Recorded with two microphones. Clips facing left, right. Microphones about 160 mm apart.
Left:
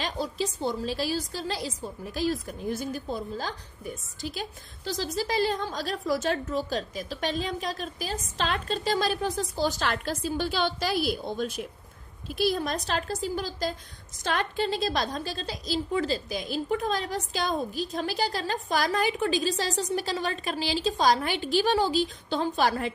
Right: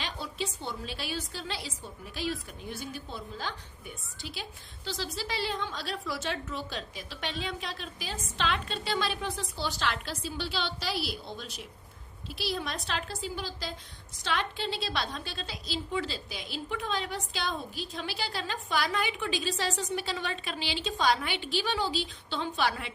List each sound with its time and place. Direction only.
0.0 s a woman's voice: 40° left (ahead or behind)